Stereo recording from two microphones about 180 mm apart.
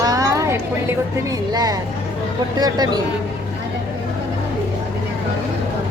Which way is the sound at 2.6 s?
20° right (ahead or behind).